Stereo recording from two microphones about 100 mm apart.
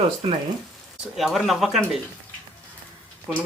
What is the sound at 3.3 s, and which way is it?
Speech, 5° right (ahead or behind).